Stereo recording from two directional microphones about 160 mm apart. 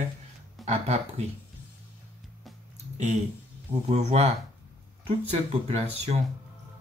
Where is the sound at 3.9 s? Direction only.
45° right (ahead or behind).